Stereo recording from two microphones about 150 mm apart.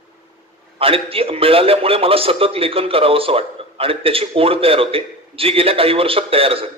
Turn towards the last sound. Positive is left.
turn(degrees=-40)  # may be behind; listen again after turning